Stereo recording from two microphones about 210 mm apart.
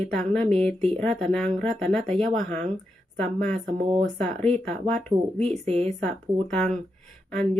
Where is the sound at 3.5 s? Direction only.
30° right (ahead or behind).